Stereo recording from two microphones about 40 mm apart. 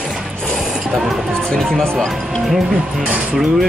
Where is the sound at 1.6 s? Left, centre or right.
Centre.